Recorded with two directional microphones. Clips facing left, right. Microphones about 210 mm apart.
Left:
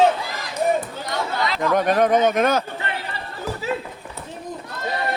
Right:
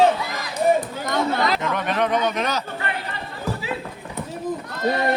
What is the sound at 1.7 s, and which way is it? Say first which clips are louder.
Speech: left 5 dB; 45° left (ahead or behind).